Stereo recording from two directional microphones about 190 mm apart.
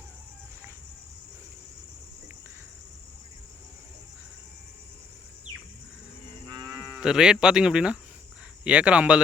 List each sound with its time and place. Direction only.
6.5 s cattle: 25° right (ahead or behind)
6.9 s speech: 5° right (ahead or behind)